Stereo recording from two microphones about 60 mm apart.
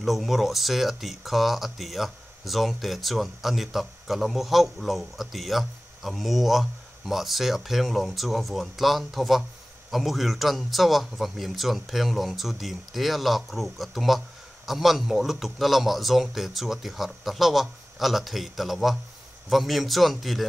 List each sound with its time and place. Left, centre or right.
0.0 s speech: centre